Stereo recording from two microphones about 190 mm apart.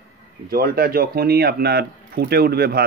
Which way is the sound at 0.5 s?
55° right (ahead or behind).